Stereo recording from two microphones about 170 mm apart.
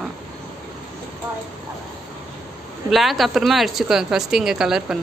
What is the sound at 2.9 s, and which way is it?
A woman's voice, centre (ahead or behind).